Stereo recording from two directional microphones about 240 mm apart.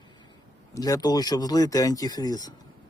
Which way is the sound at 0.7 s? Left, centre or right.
Centre.